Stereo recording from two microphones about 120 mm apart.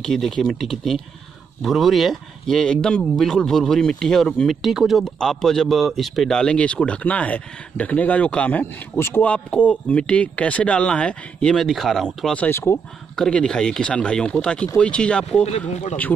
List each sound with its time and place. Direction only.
0.0 s speech: 5° left (ahead or behind)
12.4 s speech: 20° left (ahead or behind)
13.1 s speech: 5° left (ahead or behind)